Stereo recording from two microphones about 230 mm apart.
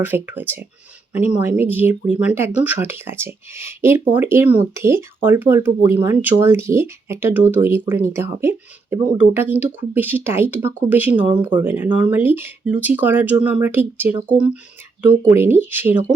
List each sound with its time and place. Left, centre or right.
0.0 s speech: centre